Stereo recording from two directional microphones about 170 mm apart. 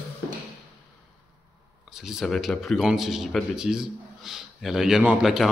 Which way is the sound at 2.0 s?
Centre (ahead or behind).